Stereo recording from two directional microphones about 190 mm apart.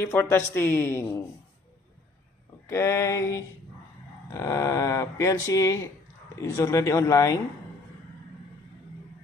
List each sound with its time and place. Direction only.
0.0 s speech: 10° left (ahead or behind)
2.7 s speech: 15° left (ahead or behind)